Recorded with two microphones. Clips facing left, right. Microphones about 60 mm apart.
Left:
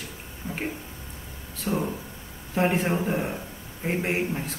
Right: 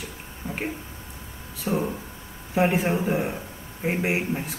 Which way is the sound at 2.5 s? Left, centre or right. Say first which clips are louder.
Right 2 dB; centre.